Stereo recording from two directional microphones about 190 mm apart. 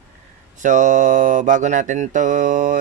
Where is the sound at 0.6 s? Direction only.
40° right (ahead or behind).